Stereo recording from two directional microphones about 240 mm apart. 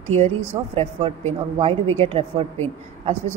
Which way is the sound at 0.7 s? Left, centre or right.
Right.